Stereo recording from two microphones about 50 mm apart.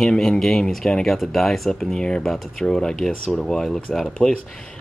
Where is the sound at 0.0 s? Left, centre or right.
Centre.